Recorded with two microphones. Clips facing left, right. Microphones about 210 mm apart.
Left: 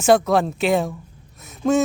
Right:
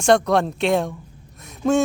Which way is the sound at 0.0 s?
5° left (ahead or behind).